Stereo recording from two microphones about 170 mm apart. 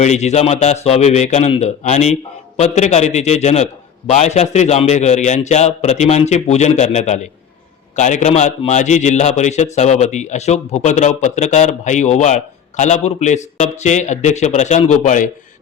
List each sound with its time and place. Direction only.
0.0 s a man's voice: 40° left (ahead or behind)